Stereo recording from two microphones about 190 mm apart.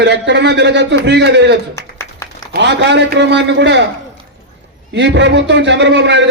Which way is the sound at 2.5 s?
65° right (ahead or behind).